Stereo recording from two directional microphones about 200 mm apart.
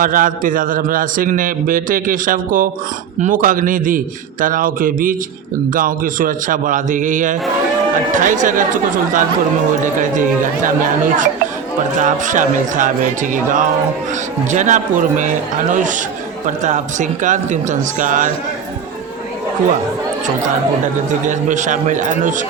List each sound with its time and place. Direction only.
0.0 s a man's voice: 45° right (ahead or behind)
21.1 s speech: 40° right (ahead or behind)